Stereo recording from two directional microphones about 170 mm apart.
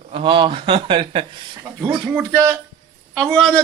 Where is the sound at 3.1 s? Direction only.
Centre (ahead or behind).